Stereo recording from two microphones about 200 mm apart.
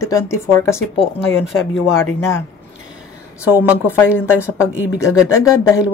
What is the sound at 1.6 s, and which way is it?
Speech, 75° left (ahead or behind).